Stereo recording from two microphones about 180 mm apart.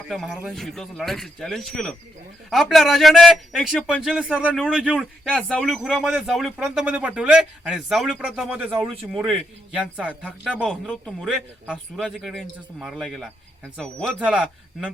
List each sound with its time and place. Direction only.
0.1 s speech: centre (ahead or behind)